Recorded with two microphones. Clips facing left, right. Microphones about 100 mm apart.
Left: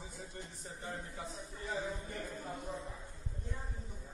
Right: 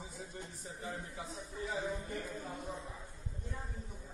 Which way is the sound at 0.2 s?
Centre (ahead or behind).